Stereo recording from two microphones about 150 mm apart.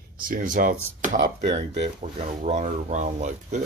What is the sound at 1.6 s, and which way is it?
Speech, 50° right (ahead or behind).